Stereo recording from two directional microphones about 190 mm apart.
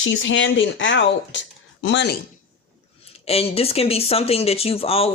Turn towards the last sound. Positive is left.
turn(degrees=30)  # may be behind; listen again after turning